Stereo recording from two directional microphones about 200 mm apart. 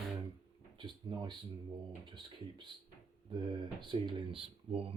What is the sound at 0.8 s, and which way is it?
Speech, 20° right (ahead or behind).